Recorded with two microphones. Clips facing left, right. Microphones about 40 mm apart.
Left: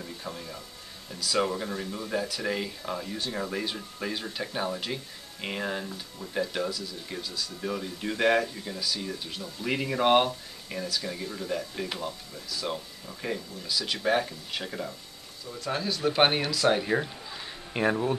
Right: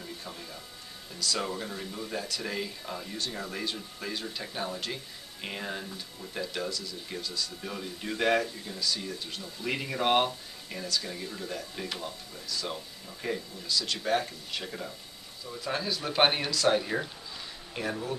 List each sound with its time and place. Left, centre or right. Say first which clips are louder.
0.2 s speech: left 4 dB; centre
15.6 s speech: left 4 dB; centre
17.7 s speech: left 8 dB; left